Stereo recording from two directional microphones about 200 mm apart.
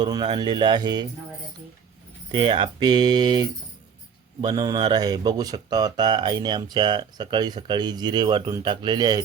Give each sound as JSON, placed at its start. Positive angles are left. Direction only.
{"t": 0.0, "sound": "speech", "side_deg": -20}
{"t": 2.3, "sound": "speech", "side_deg": -25}